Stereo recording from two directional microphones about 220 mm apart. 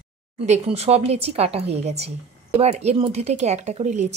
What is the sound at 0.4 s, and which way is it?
Speech, 25° right (ahead or behind).